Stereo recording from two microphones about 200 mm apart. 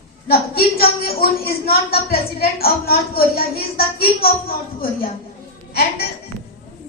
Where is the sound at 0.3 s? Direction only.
50° left (ahead or behind).